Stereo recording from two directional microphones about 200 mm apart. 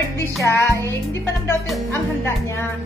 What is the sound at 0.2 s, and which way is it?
Music, 15° left (ahead or behind).